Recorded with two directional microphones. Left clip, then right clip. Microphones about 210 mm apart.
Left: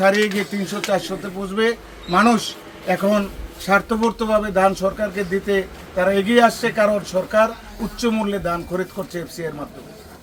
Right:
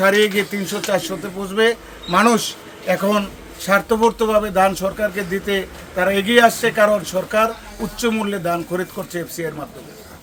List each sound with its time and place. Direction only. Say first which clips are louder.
0.0 s speech: right 2 dB; 20° right (ahead or behind)